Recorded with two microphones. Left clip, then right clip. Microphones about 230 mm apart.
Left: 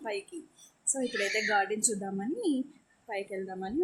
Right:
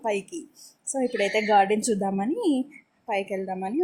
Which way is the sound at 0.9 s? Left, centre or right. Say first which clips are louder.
Right 7 dB; centre.